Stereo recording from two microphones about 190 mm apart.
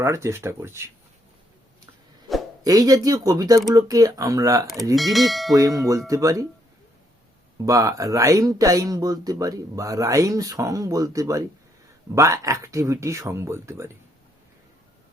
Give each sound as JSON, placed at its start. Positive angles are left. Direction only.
{"t": 0.0, "sound": "speech", "side_deg": -15}
{"t": 2.6, "sound": "speech", "side_deg": -20}
{"t": 4.6, "sound": "speech", "side_deg": 0}
{"t": 5.5, "sound": "speech", "side_deg": -20}
{"t": 7.6, "sound": "speech", "side_deg": -15}